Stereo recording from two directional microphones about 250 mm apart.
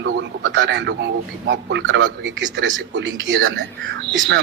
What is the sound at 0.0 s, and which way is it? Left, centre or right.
A man's voice, right.